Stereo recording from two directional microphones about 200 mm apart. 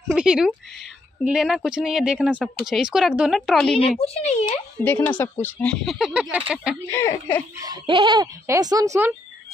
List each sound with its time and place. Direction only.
0.1 s speech: 5° right (ahead or behind)
4.0 s speech: 30° left (ahead or behind)
4.8 s speech: 10° left (ahead or behind)
6.9 s speech: 10° left (ahead or behind)
7.6 s speech: 20° right (ahead or behind)